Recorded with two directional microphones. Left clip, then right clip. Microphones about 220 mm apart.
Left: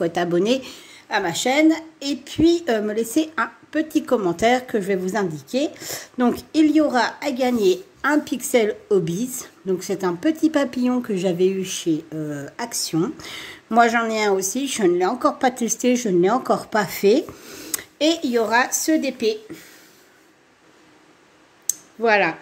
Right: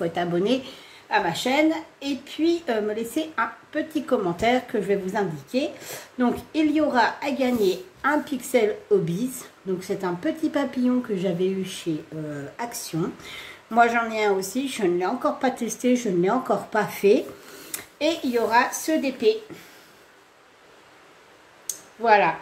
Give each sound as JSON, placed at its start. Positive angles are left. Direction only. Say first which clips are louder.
{"t": 0.0, "sound": "speech", "louder": "left 4 dB", "side_deg": 50}
{"t": 21.6, "sound": "clicking", "louder": "even", "side_deg": 50}